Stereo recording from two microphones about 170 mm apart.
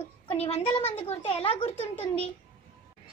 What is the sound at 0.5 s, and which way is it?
Speech, 40° left (ahead or behind).